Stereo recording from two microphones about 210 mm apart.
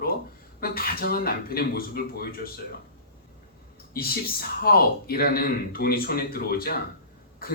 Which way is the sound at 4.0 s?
45° left (ahead or behind).